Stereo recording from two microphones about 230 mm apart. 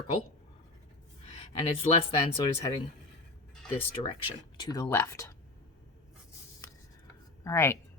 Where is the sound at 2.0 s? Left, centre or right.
Left.